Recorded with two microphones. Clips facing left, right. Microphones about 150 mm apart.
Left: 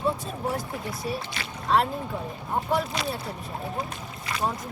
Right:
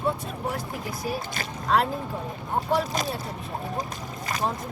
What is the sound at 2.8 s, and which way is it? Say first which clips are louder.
Speech: right 1 dB; 40° right (ahead or behind).